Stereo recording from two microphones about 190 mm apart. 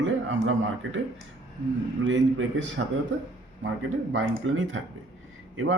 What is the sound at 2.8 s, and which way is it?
Speech, 75° right (ahead or behind).